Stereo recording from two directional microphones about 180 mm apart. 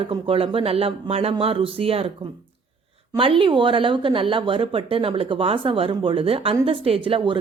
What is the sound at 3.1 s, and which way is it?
Speech, 30° right (ahead or behind).